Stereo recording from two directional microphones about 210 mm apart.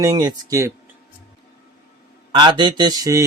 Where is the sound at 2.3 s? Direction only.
20° right (ahead or behind).